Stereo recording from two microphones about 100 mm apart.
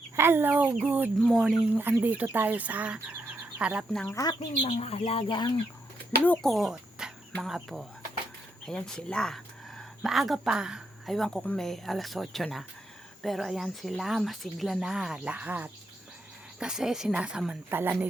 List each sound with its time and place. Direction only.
0.2 s speech: 20° right (ahead or behind)
1.2 s speech: 5° right (ahead or behind)
1.8 s speech: 20° right (ahead or behind)
4.1 s speech: 35° left (ahead or behind)
4.6 s speech: 90° left
5.3 s speech: 50° left (ahead or behind)
6.4 s speech: centre (ahead or behind)
17.7 s speech: 20° right (ahead or behind)